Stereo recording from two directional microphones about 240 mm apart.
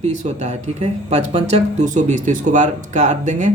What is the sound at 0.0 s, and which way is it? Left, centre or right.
Speech, right.